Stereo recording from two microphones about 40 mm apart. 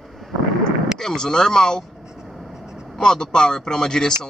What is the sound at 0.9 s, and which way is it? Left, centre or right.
Speech, centre.